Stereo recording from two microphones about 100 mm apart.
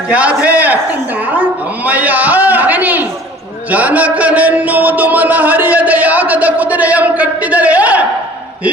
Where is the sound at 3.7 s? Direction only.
15° right (ahead or behind).